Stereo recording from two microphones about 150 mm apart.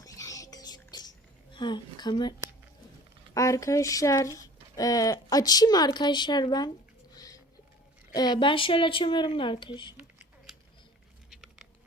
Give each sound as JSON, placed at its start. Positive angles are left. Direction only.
{"t": 0.0, "sound": "music", "side_deg": 20}
{"t": 1.5, "sound": "speech", "side_deg": 30}
{"t": 3.3, "sound": "speech", "side_deg": 20}
{"t": 7.2, "sound": "music", "side_deg": 25}
{"t": 8.1, "sound": "a woman's voice", "side_deg": 30}